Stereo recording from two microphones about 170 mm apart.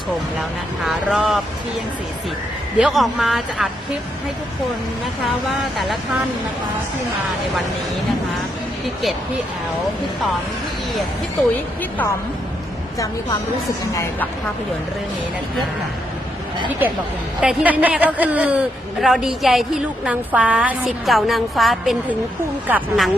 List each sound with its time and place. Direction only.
0.9 s a man's voice: centre (ahead or behind)
2.7 s a man's voice: 5° right (ahead or behind)
5.2 s a man's voice: centre (ahead or behind)
11.8 s a woman's voice: 10° left (ahead or behind)
13.9 s a woman's voice: 15° left (ahead or behind)
17.4 s a man's voice: 10° right (ahead or behind)